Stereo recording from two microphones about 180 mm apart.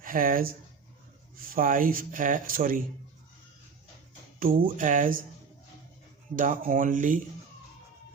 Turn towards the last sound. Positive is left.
turn(degrees=-45)  # may be behind; listen again after turning